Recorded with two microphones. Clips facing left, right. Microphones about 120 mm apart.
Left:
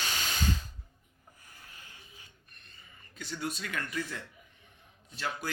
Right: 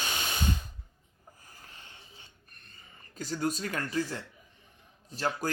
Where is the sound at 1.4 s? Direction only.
35° right (ahead or behind).